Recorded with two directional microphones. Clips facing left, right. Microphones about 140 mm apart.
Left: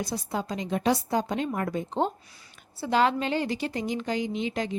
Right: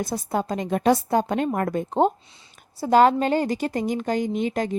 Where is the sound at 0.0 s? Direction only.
50° right (ahead or behind).